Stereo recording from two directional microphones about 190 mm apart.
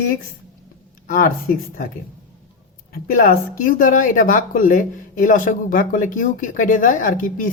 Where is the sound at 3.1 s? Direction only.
45° left (ahead or behind).